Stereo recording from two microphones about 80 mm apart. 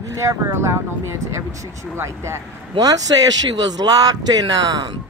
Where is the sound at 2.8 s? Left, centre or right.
Right.